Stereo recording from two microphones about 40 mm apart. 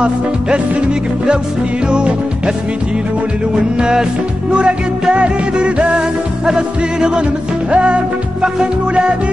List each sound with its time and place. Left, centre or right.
0.0 s music: right
3.5 s music: centre